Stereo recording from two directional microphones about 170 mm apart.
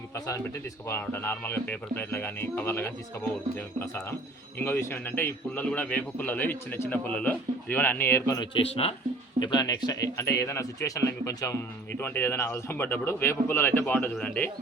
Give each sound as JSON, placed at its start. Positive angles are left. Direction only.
{"t": 0.9, "sound": "speech", "side_deg": 15}
{"t": 8.4, "sound": "speech", "side_deg": 35}
{"t": 9.4, "sound": "speech", "side_deg": 25}